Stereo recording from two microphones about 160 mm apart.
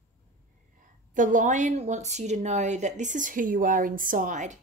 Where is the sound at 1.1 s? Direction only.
55° right (ahead or behind).